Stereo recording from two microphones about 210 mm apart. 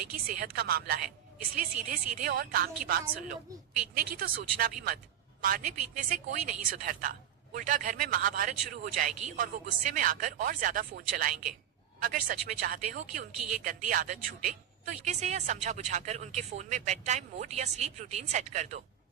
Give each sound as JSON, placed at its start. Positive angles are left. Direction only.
{"t": 0.3, "sound": "a woman's voice", "side_deg": -50}